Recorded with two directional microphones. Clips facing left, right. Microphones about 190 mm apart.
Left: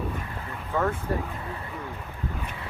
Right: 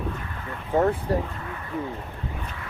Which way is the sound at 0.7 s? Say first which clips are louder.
Right 5 dB; 40° right (ahead or behind).